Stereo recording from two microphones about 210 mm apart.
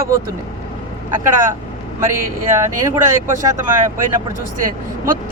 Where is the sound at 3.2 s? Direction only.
40° right (ahead or behind).